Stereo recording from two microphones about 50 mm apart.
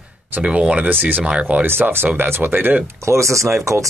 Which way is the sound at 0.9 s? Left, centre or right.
Right.